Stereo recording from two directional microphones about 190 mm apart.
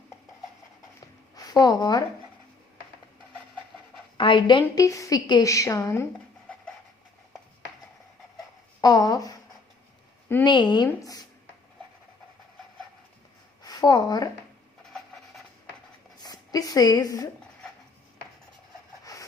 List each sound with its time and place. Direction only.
1.4 s a woman's voice: 20° left (ahead or behind)
4.2 s a woman's voice: 25° left (ahead or behind)
8.8 s speech: 20° left (ahead or behind)
10.4 s speech: 25° left (ahead or behind)
13.6 s a woman's voice: 20° left (ahead or behind)
16.1 s a woman's voice: 20° left (ahead or behind)